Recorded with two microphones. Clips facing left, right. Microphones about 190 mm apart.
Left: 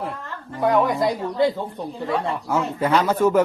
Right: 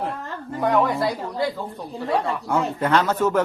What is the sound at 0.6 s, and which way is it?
Speech, 10° left (ahead or behind).